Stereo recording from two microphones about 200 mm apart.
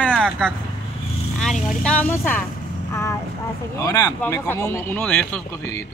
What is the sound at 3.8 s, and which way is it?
Speech, 15° left (ahead or behind).